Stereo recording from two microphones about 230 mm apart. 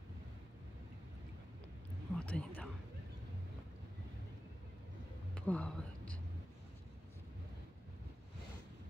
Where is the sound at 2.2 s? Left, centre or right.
Centre.